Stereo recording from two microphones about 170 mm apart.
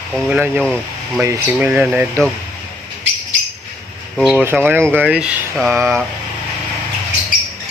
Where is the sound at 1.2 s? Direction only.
15° right (ahead or behind).